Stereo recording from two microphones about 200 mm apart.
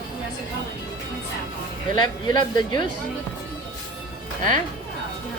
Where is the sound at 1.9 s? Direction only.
20° left (ahead or behind).